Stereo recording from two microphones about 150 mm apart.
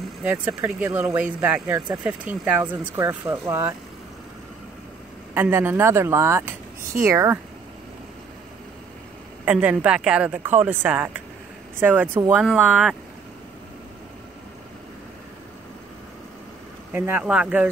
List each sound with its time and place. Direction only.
0.2 s speech: 10° right (ahead or behind)
5.3 s speech: 15° right (ahead or behind)
9.4 s speech: 10° right (ahead or behind)
16.9 s speech: 15° right (ahead or behind)